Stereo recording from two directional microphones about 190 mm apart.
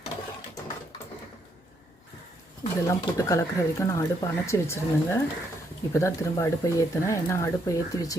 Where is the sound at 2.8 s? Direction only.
15° left (ahead or behind).